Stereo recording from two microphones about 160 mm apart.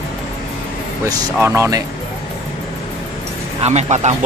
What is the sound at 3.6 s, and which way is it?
Speech, 45° right (ahead or behind).